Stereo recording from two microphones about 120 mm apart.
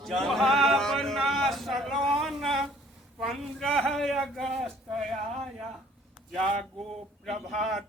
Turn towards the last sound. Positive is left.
turn(degrees=0)  # may be behind; listen again after turning